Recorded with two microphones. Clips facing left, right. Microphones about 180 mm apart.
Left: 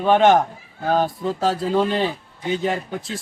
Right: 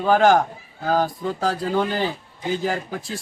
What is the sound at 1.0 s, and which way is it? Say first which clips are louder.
Speech: left 2 dB; 25° left (ahead or behind).